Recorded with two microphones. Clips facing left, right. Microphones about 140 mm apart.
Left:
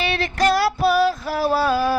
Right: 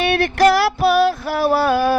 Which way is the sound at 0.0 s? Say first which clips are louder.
Right 6 dB; 60° right (ahead or behind).